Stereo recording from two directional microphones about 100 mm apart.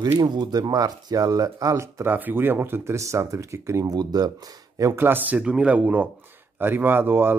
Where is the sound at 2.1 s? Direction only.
20° right (ahead or behind).